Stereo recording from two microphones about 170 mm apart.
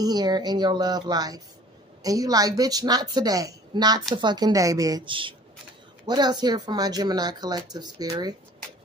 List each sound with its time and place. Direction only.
0.0 s speech: 25° right (ahead or behind)